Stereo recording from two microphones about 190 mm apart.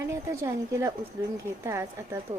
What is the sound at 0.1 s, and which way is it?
Speech, 15° right (ahead or behind).